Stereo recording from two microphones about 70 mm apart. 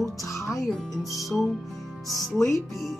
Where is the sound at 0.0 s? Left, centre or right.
Left.